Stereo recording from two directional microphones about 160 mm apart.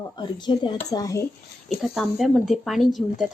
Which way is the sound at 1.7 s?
Centre (ahead or behind).